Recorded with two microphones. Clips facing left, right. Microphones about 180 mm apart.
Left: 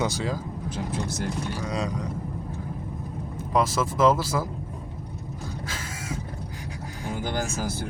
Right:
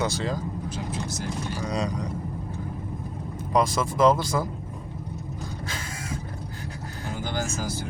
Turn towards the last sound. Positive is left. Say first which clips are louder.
# left 1 dB
turn(degrees=55)  # may be behind; listen again after turning